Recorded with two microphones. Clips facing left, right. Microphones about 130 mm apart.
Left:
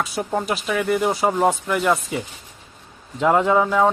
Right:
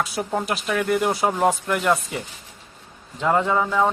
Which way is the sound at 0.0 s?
Centre (ahead or behind).